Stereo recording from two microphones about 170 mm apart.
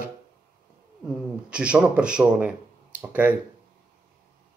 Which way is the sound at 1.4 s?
5° right (ahead or behind).